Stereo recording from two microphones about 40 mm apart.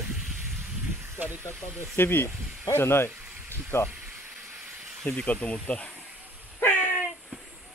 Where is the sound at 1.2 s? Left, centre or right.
Right.